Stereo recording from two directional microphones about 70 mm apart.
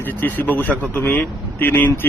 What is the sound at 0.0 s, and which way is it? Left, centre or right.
A man's voice, left.